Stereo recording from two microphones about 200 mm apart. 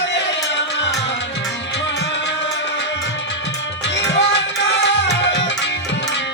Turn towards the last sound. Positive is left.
turn(degrees=60)  # may be behind; listen again after turning